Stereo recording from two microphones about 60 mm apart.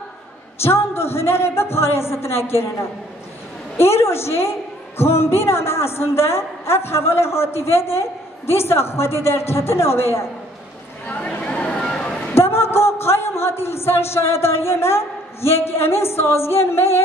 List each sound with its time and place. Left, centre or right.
0.6 s a woman's voice: left
3.7 s a woman's voice: left
11.1 s chatter: centre
12.4 s speech: left